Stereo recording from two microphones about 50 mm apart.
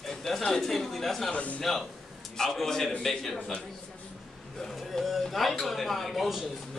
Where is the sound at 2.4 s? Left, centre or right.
Centre.